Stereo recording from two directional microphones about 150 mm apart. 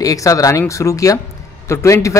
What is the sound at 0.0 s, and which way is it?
A man's voice, 20° left (ahead or behind).